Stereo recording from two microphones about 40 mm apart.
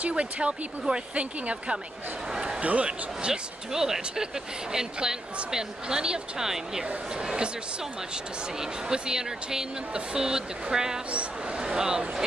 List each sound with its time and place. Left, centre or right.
0.1 s speech: right
3.2 s speech: centre
8.5 s speech: centre